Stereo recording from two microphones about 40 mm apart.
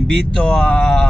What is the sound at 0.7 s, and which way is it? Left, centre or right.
Speech, centre.